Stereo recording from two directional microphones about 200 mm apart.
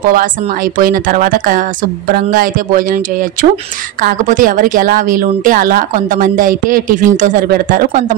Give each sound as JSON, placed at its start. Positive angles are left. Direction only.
{"t": 0.7, "sound": "a woman's voice", "side_deg": -45}